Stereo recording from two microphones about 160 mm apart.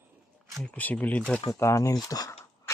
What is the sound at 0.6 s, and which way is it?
Speech, 10° left (ahead or behind).